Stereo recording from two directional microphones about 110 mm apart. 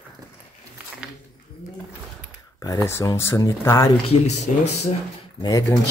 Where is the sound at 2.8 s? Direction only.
25° left (ahead or behind).